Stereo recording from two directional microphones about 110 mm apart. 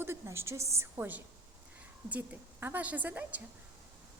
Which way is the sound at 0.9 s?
15° right (ahead or behind).